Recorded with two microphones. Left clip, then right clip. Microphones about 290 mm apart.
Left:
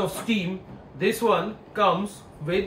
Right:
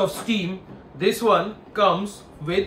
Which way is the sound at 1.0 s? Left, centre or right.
Centre.